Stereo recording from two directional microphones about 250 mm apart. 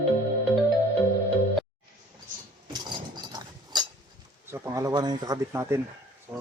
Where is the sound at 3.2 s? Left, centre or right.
Centre.